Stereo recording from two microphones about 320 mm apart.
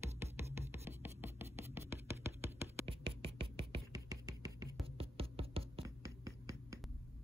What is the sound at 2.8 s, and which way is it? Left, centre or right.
Music, centre.